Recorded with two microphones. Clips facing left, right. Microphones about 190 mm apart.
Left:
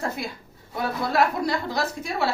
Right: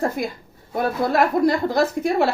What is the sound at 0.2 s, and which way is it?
Speech, 50° right (ahead or behind).